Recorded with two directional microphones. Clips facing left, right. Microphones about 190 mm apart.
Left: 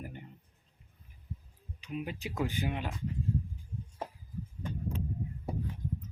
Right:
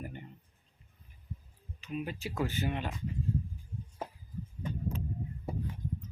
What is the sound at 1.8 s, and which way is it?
Speech, 15° left (ahead or behind).